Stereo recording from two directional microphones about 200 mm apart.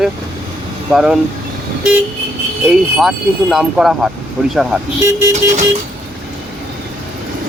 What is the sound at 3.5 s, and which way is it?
Speech, centre (ahead or behind).